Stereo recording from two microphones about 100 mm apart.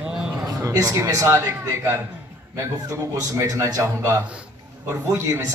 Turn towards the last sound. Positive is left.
turn(degrees=-30)  # may be behind; listen again after turning